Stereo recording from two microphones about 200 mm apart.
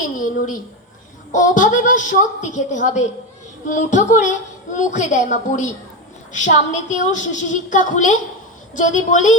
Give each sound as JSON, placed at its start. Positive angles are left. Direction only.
{"t": 1.3, "sound": "a woman's voice", "side_deg": 40}